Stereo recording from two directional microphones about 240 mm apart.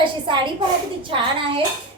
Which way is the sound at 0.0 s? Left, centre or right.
Centre.